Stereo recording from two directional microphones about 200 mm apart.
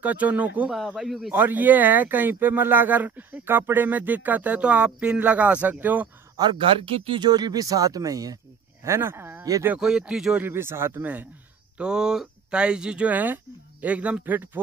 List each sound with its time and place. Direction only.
0.0 s speech: 5° right (ahead or behind)
6.4 s speech: 25° right (ahead or behind); by 14.6 s 10° right (ahead or behind)